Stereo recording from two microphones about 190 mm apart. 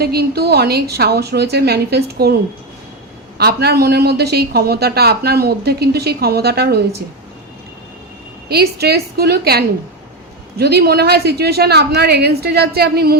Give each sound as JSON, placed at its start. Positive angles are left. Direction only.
{"t": 0.0, "sound": "speech", "side_deg": -55}
{"t": 8.4, "sound": "speech", "side_deg": -55}